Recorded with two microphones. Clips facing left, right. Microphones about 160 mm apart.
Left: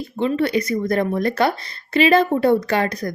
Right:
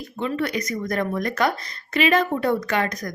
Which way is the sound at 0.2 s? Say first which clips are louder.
Left 6 dB; 30° left (ahead or behind).